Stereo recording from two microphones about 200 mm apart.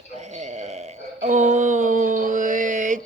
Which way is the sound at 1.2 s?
35° right (ahead or behind).